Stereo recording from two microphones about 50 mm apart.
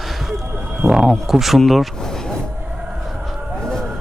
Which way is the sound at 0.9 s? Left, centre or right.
Centre.